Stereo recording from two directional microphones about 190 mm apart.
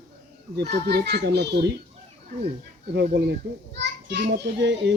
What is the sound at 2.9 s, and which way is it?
A child's voice, 55° right (ahead or behind).